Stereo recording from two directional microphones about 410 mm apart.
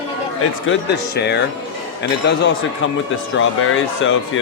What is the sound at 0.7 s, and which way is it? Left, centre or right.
Speech, left.